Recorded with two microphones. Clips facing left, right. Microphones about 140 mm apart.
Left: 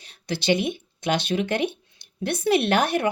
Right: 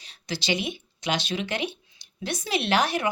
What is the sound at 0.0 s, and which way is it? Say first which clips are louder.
Speech: left 5 dB; 55° left (ahead or behind).